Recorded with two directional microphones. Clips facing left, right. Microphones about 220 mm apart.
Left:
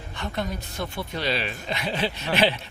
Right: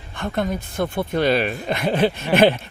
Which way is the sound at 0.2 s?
50° right (ahead or behind).